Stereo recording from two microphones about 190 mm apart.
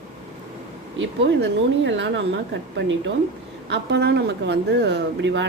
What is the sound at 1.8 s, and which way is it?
Speech, 70° right (ahead or behind).